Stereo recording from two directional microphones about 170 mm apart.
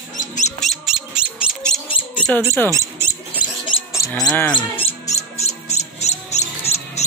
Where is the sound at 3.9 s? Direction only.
20° left (ahead or behind).